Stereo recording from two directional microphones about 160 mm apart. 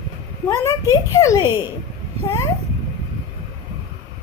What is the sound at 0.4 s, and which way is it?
A child's voice, 20° left (ahead or behind).